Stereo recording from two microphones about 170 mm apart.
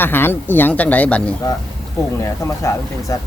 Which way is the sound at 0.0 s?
10° left (ahead or behind).